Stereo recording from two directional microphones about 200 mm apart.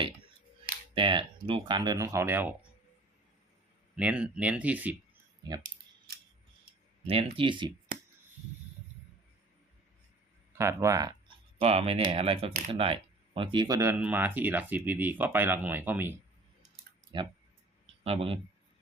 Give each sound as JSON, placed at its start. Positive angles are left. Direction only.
{"t": 0.9, "sound": "speech", "side_deg": -25}
{"t": 3.9, "sound": "speech", "side_deg": -5}
{"t": 5.4, "sound": "speech", "side_deg": -20}
{"t": 7.1, "sound": "speech", "side_deg": -25}
{"t": 10.6, "sound": "speech", "side_deg": -15}
{"t": 11.6, "sound": "speech", "side_deg": -30}
{"t": 17.1, "sound": "speech", "side_deg": -25}